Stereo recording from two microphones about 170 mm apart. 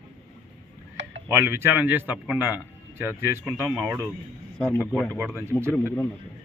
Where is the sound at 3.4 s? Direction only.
Centre (ahead or behind).